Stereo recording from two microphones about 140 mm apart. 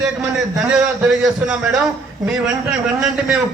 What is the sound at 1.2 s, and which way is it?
A man's voice, 5° right (ahead or behind).